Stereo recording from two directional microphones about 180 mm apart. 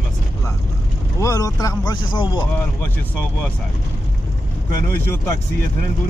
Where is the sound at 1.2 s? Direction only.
20° left (ahead or behind).